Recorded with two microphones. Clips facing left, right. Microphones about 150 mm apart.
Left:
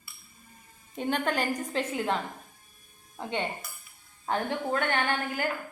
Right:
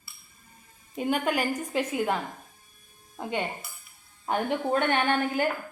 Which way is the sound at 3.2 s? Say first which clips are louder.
Right 2 dB; 5° right (ahead or behind).